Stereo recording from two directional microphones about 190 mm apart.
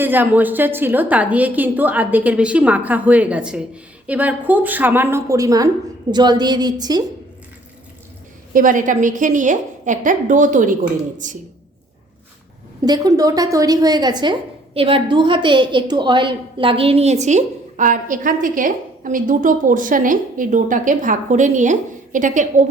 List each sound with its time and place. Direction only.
0.0 s a woman's voice: 10° right (ahead or behind)
8.5 s a woman's voice: 45° right (ahead or behind)
12.8 s a woman's voice: 20° right (ahead or behind); by 22.6 s 40° right (ahead or behind)